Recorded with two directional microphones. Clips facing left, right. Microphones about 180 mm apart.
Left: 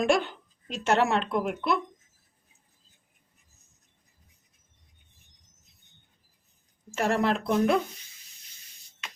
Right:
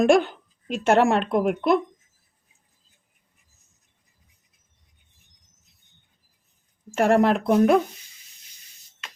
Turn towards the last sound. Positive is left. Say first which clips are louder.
# right 6 dB
turn(degrees=-55)  # may be behind; listen again after turning